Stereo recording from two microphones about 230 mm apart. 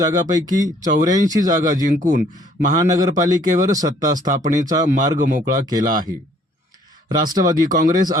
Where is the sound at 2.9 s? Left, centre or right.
Centre.